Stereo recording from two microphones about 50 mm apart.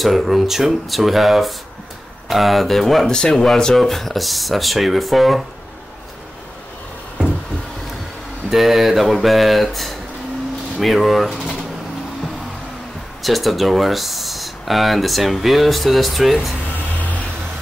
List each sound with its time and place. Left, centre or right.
0.0 s speech: centre
8.5 s speech: centre
13.2 s speech: centre
16.7 s vehicle: left